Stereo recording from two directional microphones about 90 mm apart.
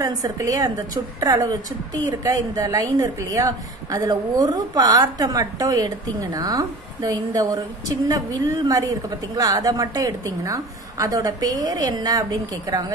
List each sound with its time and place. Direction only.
0.0 s a woman's voice: 40° right (ahead or behind)